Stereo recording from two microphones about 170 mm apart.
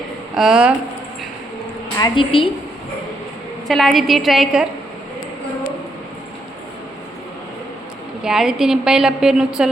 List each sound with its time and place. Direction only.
0.3 s a woman's voice: 5° right (ahead or behind)
2.0 s a woman's voice: 30° left (ahead or behind)
3.7 s a woman's voice: centre (ahead or behind)
8.2 s a woman's voice: 5° right (ahead or behind)